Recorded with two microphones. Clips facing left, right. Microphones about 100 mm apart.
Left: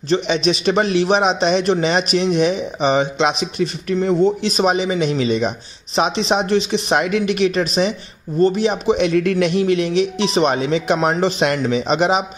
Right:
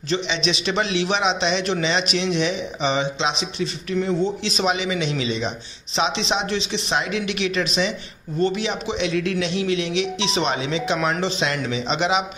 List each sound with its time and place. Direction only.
0.1 s a man's voice: 45° left (ahead or behind)
11.0 s speech: 35° left (ahead or behind)
11.2 s a man's voice: 50° left (ahead or behind)